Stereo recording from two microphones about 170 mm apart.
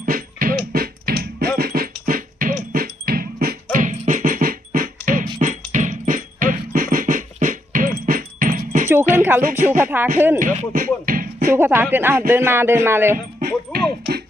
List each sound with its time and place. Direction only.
0.0 s music: 55° right (ahead or behind)
8.9 s music: 15° right (ahead or behind)
9.4 s speech: 55° right (ahead or behind)
9.7 s a man's voice: 10° right (ahead or behind)
10.4 s beatboxing: 55° right (ahead or behind)
11.5 s a man's voice: 10° right (ahead or behind)
13.1 s music: 60° right (ahead or behind)